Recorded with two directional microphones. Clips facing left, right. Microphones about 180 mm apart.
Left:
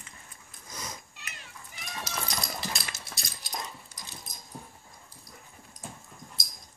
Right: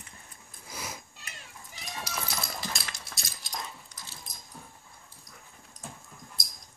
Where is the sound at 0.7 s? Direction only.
5° right (ahead or behind).